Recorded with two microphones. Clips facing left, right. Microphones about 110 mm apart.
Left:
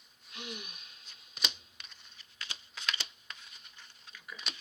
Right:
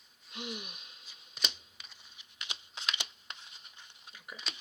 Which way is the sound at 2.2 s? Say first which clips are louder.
Right 1 dB; 20° right (ahead or behind).